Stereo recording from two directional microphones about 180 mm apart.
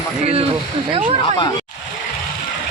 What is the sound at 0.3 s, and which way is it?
Speech, 35° right (ahead or behind).